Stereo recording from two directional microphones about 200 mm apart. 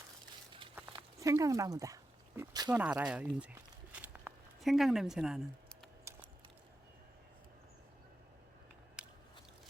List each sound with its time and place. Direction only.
0.8 s dog: 10° right (ahead or behind)
2.6 s a sound: 5° right (ahead or behind)
9.0 s biting: 5° right (ahead or behind)